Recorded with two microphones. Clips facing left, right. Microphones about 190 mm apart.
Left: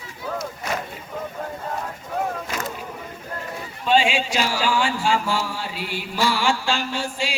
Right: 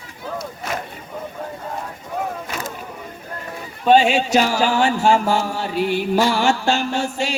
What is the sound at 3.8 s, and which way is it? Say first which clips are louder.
A man's voice: right 5 dB; 45° right (ahead or behind).